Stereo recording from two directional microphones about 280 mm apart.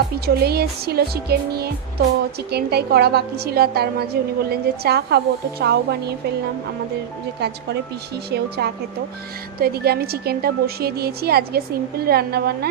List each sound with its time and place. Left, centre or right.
0.4 s a woman's voice: right
8.3 s a woman's voice: right